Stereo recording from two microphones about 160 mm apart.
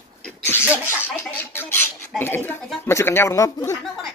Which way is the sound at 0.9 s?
15° left (ahead or behind).